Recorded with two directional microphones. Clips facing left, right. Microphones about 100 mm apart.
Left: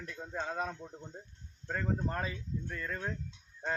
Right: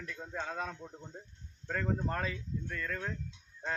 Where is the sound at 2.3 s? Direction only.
25° left (ahead or behind).